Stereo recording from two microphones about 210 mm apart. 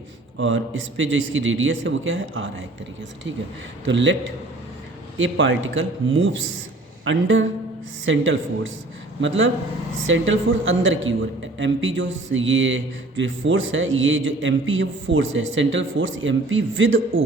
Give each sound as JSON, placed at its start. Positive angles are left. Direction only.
{"t": 0.3, "sound": "a man's voice", "side_deg": -65}
{"t": 3.8, "sound": "a woman's voice", "side_deg": -60}